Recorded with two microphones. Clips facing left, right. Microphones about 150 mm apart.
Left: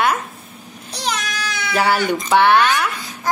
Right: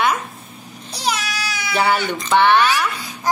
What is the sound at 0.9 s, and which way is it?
Baby cry, 10° right (ahead or behind).